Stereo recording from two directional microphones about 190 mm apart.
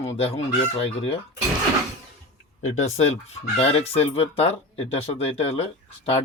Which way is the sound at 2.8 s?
35° left (ahead or behind).